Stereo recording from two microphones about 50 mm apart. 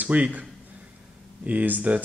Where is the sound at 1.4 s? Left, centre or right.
Right.